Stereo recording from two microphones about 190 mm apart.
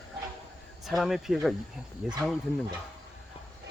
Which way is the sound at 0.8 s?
Centre (ahead or behind).